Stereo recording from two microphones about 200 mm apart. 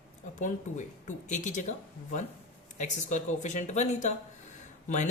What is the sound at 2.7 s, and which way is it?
Speech, 35° left (ahead or behind).